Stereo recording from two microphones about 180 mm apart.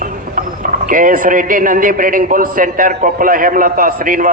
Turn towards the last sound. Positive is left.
turn(degrees=-50)  # may be behind; listen again after turning